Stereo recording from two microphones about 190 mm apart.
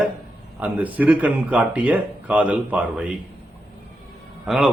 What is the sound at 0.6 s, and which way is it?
Mantra, 10° right (ahead or behind).